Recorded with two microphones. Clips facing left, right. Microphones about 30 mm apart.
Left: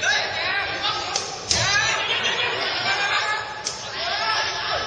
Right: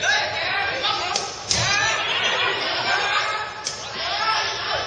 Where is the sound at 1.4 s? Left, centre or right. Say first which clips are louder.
Even; centre.